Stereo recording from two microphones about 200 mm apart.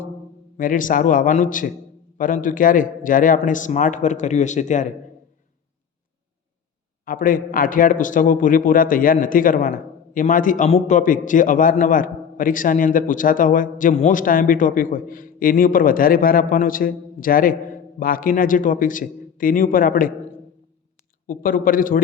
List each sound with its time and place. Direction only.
0.5 s a man's voice: 40° left (ahead or behind)
7.0 s a man's voice: 45° left (ahead or behind)
21.2 s a man's voice: 45° left (ahead or behind)